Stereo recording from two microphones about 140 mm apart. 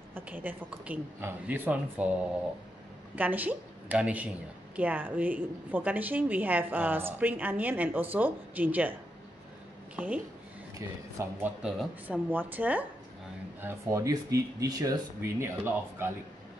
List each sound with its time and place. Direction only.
0.1 s a woman's voice: 15° right (ahead or behind)
3.2 s a woman's voice: 10° right (ahead or behind)
9.9 s speech: 10° right (ahead or behind)
11.6 s a woman's voice: 10° right (ahead or behind)